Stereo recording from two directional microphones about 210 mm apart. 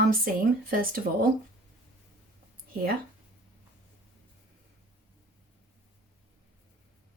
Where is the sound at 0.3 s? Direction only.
40° right (ahead or behind).